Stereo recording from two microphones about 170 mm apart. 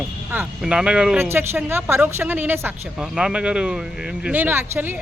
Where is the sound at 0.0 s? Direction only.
10° right (ahead or behind).